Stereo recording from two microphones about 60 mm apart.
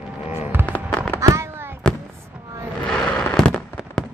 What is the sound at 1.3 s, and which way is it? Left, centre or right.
Fireworks, right.